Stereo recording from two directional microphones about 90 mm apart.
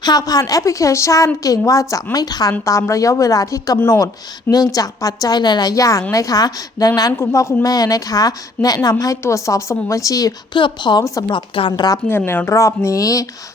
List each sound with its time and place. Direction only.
0.0 s a woman's voice: 45° left (ahead or behind)
10.5 s a woman's voice: 60° left (ahead or behind)
11.0 s a woman's voice: 40° left (ahead or behind)
11.3 s a woman's voice: 70° left (ahead or behind)
12.0 s a woman's voice: 25° left (ahead or behind)